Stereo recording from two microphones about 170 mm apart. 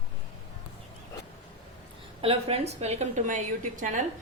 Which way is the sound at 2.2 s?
35° right (ahead or behind).